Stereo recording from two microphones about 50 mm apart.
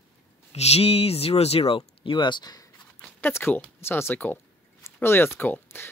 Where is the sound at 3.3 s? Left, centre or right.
Left.